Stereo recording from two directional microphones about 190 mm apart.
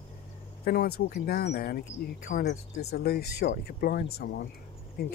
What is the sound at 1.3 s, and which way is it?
Speech, 55° left (ahead or behind).